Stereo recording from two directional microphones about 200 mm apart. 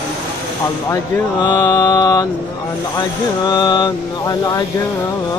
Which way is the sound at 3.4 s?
20° left (ahead or behind).